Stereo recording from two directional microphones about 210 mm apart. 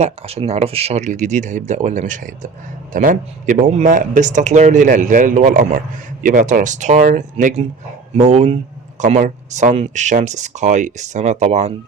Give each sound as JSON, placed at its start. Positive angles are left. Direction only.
{"t": 0.0, "sound": "speech", "side_deg": -30}